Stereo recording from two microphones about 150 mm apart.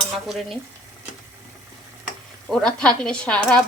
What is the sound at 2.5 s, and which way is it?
Speech, 5° left (ahead or behind).